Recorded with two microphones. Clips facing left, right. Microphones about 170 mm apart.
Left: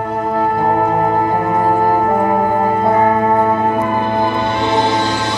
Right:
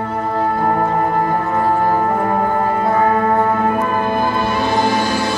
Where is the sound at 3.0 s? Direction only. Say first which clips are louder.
Left 2 dB; 25° left (ahead or behind).